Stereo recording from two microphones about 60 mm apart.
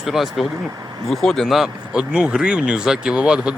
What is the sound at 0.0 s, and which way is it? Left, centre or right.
Speech, centre.